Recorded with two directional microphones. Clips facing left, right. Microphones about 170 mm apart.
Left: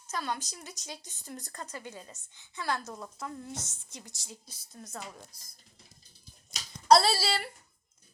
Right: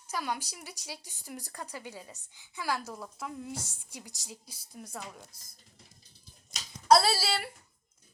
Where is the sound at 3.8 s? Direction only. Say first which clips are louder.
Right 1 dB; 10° right (ahead or behind).